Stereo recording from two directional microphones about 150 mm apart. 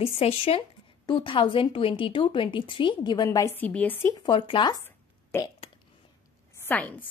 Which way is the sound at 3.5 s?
10° left (ahead or behind).